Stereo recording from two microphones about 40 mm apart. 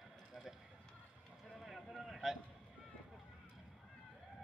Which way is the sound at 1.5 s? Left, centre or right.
Centre.